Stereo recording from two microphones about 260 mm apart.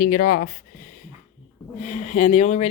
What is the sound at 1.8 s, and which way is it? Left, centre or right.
Speech, left.